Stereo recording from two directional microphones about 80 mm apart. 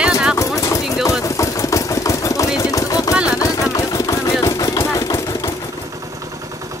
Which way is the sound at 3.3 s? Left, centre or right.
Left.